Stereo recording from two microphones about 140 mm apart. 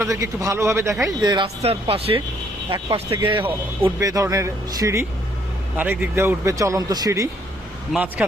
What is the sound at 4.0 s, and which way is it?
A man's voice, 25° right (ahead or behind).